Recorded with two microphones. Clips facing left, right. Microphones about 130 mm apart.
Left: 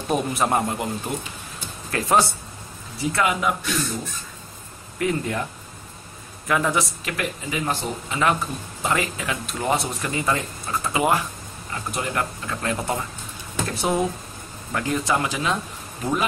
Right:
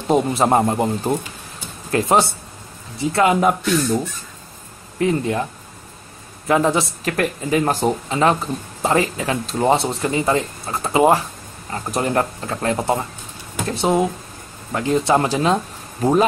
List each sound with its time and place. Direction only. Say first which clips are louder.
0.1 s speech: right 6 dB; 30° right (ahead or behind)
4.9 s speech: right 5 dB; 25° right (ahead or behind)
6.4 s speech: right 5 dB; 25° right (ahead or behind)
7.1 s speech: right 8 dB; 45° right (ahead or behind)
8.2 s speech: right 3 dB; 30° right (ahead or behind)
15.1 s speech: right 7 dB; 35° right (ahead or behind)